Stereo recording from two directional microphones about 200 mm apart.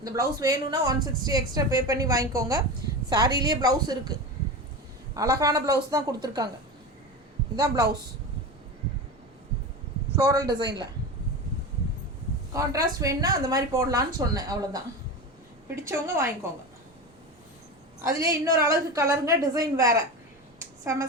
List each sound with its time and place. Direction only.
0.0 s a woman's voice: 15° right (ahead or behind)
7.5 s a woman's voice: 15° right (ahead or behind)
10.2 s a woman's voice: 15° right (ahead or behind)
12.5 s a woman's voice: 15° right (ahead or behind)
15.9 s a woman's voice: 15° right (ahead or behind)
18.2 s a woman's voice: 15° right (ahead or behind)
20.6 s a sound: 15° right (ahead or behind)